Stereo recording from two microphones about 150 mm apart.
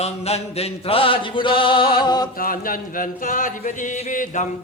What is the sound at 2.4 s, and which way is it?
Speech, 70° left (ahead or behind).